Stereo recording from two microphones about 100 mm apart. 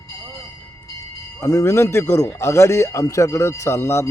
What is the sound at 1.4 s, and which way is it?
A man's voice, 30° left (ahead or behind).